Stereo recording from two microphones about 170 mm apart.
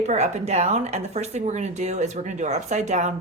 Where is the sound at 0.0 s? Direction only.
40° right (ahead or behind).